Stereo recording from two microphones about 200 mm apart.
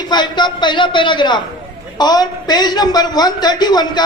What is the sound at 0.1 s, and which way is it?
A woman's voice, 20° left (ahead or behind).